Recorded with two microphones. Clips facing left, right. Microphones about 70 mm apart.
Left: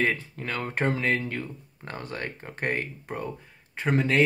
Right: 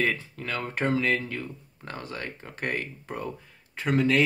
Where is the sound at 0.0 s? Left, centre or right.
Left.